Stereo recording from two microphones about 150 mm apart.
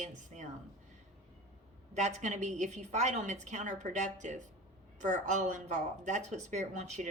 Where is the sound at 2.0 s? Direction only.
50° right (ahead or behind).